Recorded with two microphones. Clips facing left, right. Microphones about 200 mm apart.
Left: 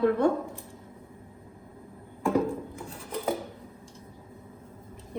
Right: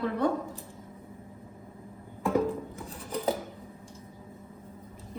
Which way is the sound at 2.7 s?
Centre (ahead or behind).